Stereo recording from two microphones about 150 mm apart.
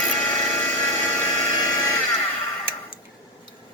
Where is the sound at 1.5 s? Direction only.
25° left (ahead or behind).